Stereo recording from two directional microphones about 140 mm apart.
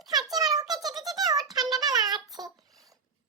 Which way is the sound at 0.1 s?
30° right (ahead or behind).